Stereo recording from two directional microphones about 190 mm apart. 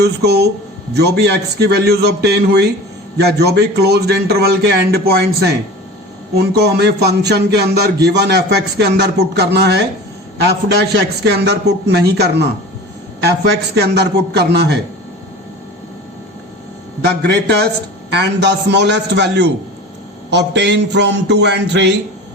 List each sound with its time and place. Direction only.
0.0 s a man's voice: 60° right (ahead or behind)
6.3 s a man's voice: 55° right (ahead or behind)
17.1 s a man's voice: 65° right (ahead or behind)